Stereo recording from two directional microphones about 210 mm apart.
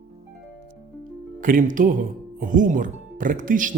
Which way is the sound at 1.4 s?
40° right (ahead or behind).